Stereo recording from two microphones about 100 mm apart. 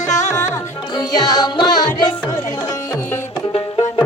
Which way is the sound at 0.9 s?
40° left (ahead or behind).